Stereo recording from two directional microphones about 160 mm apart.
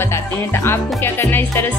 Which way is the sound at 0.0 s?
15° left (ahead or behind).